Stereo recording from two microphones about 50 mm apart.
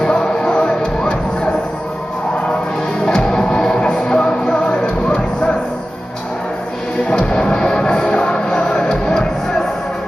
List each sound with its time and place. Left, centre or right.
0.0 s music: centre
3.1 s music: centre
7.1 s music: centre